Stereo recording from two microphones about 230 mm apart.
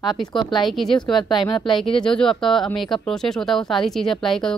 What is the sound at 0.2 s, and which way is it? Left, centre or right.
Speech, centre.